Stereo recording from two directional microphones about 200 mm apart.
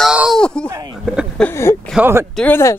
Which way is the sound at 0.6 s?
15° right (ahead or behind).